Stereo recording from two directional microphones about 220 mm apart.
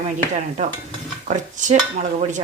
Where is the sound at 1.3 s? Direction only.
35° right (ahead or behind).